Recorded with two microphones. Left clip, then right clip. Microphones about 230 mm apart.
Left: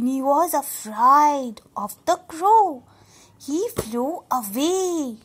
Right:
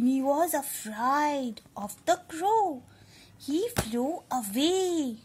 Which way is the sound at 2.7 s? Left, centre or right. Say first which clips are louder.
Left 5 dB; centre.